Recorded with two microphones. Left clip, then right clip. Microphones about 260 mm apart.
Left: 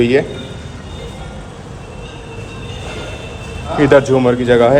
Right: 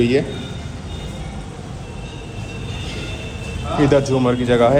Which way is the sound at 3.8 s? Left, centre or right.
Centre.